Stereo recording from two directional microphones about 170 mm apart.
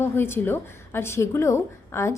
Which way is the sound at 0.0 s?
15° left (ahead or behind).